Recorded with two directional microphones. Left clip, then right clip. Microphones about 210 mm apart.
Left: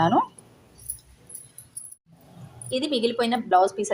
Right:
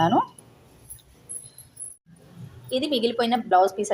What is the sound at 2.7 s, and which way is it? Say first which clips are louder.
A woman's voice: right 1 dB; centre (ahead or behind).